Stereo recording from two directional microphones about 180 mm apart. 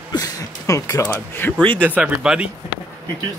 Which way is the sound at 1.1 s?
10° left (ahead or behind).